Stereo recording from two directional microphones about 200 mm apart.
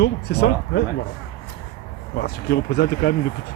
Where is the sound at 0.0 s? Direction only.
55° left (ahead or behind).